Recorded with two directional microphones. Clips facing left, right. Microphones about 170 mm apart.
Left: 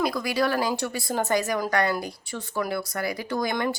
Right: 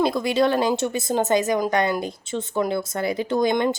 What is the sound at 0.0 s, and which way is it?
A woman's voice, 25° right (ahead or behind).